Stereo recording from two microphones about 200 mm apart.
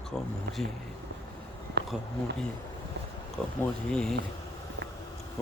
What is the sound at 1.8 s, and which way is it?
Bee, 55° right (ahead or behind).